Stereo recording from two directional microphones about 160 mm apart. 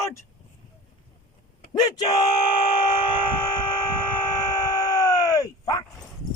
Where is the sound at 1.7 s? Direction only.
25° left (ahead or behind).